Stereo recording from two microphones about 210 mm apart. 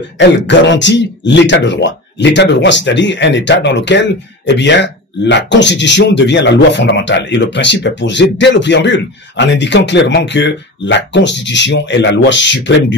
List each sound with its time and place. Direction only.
0.2 s speech: 60° left (ahead or behind)